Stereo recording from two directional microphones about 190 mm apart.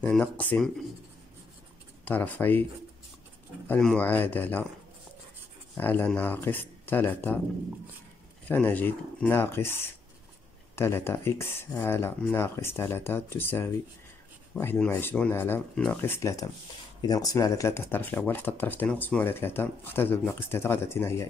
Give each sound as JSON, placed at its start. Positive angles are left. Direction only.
{"t": 0.0, "sound": "speech", "side_deg": 5}
{"t": 2.0, "sound": "speech", "side_deg": 10}
{"t": 3.6, "sound": "speech", "side_deg": 5}
{"t": 5.8, "sound": "speech", "side_deg": 10}
{"t": 8.5, "sound": "speech", "side_deg": 10}